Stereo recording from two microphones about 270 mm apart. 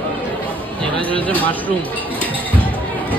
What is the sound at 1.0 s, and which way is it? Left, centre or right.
Music, centre.